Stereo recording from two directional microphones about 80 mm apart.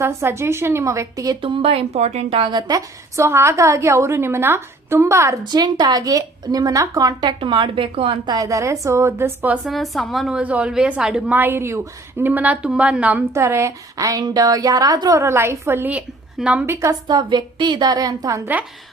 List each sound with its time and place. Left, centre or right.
0.0 s a woman's voice: right
1.4 s speech: right
2.4 s a woman's voice: right
2.7 s a woman's voice: right
5.4 s a woman's voice: right
8.3 s a woman's voice: right
9.6 s speech: centre
10.3 s a woman's voice: centre
11.3 s a woman's voice: right
12.2 s a woman's voice: right
13.3 s a woman's voice: right
15.2 s a woman's voice: right
15.9 s a woman's voice: centre
17.1 s a woman's voice: right